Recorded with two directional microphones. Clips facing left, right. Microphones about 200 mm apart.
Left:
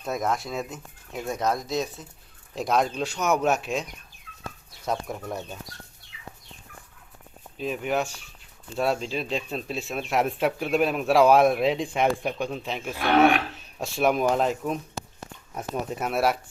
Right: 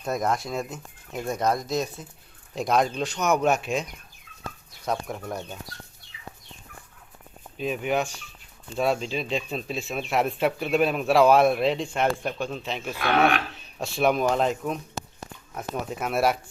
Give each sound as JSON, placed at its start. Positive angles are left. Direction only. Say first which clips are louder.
{"t": 0.0, "sound": "speech", "louder": "right 1 dB", "side_deg": 0}
{"t": 4.9, "sound": "speech", "louder": "even", "side_deg": 0}
{"t": 7.6, "sound": "speech", "louder": "right 1 dB", "side_deg": 0}